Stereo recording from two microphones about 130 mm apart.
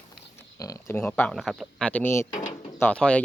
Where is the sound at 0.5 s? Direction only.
25° left (ahead or behind); by 1.8 s centre (ahead or behind).